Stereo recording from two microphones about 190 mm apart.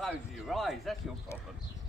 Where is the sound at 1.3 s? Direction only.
15° left (ahead or behind).